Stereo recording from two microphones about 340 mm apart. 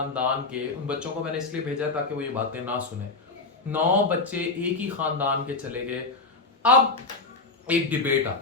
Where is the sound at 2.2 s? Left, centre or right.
Centre.